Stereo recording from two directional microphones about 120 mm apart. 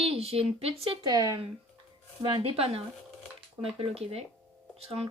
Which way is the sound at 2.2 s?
45° right (ahead or behind).